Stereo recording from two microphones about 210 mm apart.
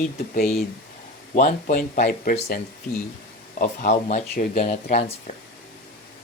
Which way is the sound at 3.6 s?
35° left (ahead or behind).